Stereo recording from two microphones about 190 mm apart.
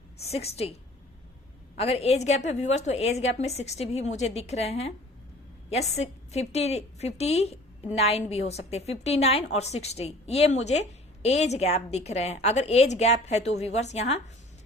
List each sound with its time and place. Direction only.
0.2 s a woman's voice: 35° left (ahead or behind)
1.7 s a woman's voice: 30° left (ahead or behind)